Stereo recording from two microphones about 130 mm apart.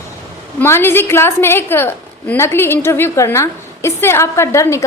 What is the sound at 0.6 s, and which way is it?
A woman's voice, 20° left (ahead or behind).